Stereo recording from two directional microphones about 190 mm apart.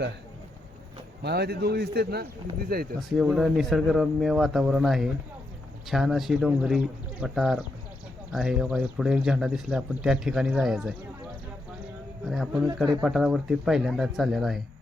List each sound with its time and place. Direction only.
1.2 s a man's voice: 60° right (ahead or behind)
3.1 s speech: centre (ahead or behind)
12.2 s speech: centre (ahead or behind)